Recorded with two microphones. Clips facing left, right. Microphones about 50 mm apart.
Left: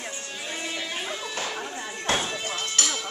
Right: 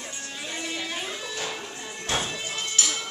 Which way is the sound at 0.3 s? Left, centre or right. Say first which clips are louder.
Right 1 dB; centre.